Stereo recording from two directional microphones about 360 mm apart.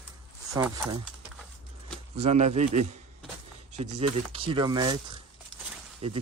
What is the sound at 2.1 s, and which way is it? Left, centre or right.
Speech, centre.